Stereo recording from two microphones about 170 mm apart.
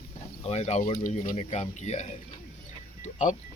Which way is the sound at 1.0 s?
50° left (ahead or behind).